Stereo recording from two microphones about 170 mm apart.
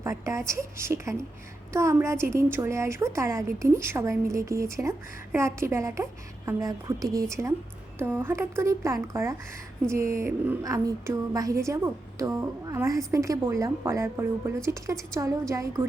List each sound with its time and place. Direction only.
0.0 s a woman's voice: 15° right (ahead or behind)